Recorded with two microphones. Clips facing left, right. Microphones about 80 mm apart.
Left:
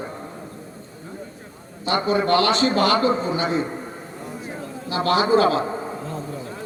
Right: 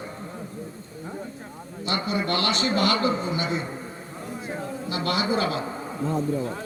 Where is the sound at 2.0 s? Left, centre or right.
Left.